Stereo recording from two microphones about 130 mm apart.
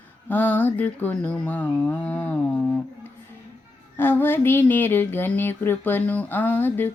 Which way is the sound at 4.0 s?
15° left (ahead or behind).